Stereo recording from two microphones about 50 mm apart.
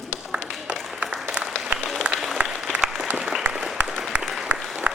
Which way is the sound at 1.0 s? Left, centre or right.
Centre.